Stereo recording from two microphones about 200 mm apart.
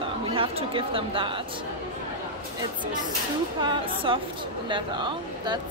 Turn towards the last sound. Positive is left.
turn(degrees=-20)  # may be behind; listen again after turning